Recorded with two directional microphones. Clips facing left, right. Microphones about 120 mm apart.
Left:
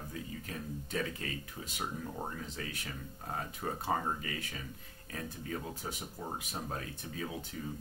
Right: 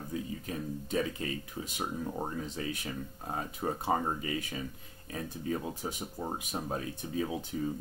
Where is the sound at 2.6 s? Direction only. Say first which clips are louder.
Right 6 dB; 20° right (ahead or behind).